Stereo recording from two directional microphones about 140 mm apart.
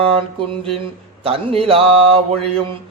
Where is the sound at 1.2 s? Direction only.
45° right (ahead or behind).